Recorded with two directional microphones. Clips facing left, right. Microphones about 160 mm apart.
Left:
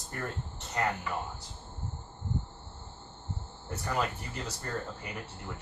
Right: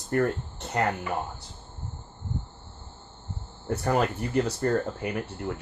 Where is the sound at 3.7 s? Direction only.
60° right (ahead or behind).